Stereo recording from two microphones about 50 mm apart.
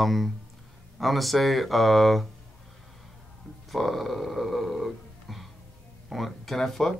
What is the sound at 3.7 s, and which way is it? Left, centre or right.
Speech, centre.